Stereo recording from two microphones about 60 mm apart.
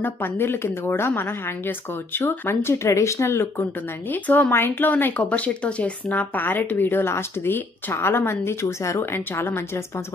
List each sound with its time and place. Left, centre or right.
0.0 s speech: left
9.1 s speech: left